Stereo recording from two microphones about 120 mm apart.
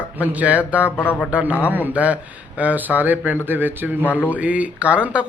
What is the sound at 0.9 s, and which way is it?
Speech, 15° left (ahead or behind).